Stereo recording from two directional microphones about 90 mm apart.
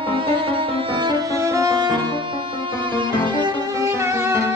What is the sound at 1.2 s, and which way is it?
Music, 35° right (ahead or behind).